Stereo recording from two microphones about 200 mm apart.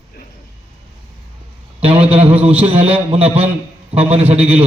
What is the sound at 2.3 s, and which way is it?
Speech, 10° right (ahead or behind).